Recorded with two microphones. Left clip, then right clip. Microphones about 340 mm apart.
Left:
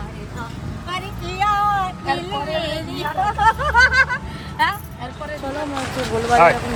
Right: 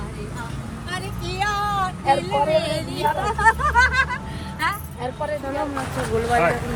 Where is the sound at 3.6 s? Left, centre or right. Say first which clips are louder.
Left 3 dB; left.